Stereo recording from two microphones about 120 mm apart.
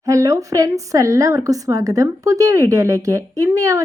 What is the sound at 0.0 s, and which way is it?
Speech, 25° right (ahead or behind).